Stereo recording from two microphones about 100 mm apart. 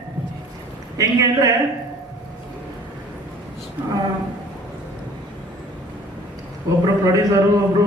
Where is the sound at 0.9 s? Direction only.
40° right (ahead or behind).